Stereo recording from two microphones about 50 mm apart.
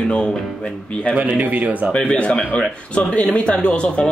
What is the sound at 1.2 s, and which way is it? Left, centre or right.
Speech, right.